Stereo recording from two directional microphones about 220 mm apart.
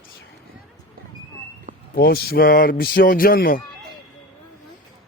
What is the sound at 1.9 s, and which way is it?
Speech, 45° left (ahead or behind).